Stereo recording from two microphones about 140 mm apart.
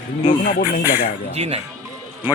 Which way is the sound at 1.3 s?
50° right (ahead or behind).